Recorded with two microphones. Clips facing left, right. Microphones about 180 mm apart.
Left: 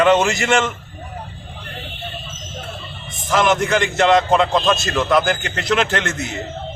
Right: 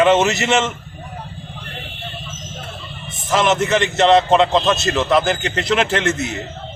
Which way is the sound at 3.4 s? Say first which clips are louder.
Right 1 dB; 25° right (ahead or behind).